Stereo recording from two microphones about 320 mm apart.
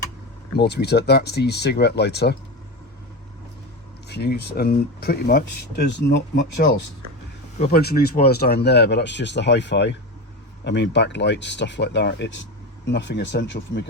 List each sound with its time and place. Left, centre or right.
0.5 s speech: left
4.1 s speech: left
7.6 s speech: left